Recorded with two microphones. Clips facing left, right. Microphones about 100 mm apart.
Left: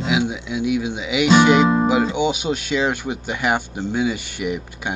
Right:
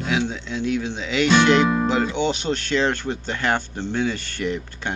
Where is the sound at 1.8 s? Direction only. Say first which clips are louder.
Left 3 dB; 10° left (ahead or behind).